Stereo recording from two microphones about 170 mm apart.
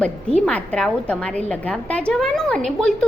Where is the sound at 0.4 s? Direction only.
5° left (ahead or behind).